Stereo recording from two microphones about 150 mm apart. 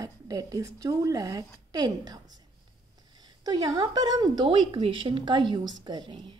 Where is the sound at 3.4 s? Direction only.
25° right (ahead or behind).